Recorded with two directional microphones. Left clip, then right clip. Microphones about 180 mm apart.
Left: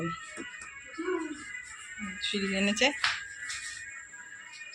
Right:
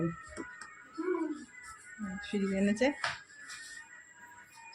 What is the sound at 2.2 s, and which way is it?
Speech, 20° right (ahead or behind).